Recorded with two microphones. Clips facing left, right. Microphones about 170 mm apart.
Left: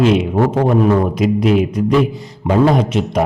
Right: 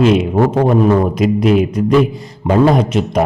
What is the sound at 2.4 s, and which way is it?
Speech, 45° right (ahead or behind).